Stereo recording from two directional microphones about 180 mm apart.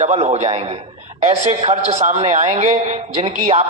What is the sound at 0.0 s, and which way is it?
A man's voice, 35° right (ahead or behind).